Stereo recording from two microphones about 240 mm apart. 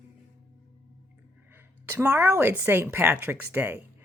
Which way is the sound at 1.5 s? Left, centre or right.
Centre.